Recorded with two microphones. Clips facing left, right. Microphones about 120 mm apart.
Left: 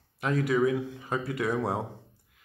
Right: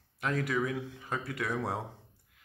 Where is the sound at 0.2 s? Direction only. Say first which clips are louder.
Left 6 dB; 5° left (ahead or behind).